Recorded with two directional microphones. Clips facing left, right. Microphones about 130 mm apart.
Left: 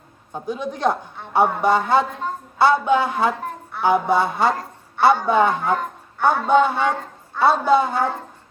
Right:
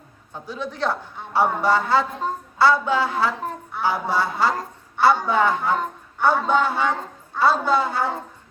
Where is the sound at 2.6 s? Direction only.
20° left (ahead or behind).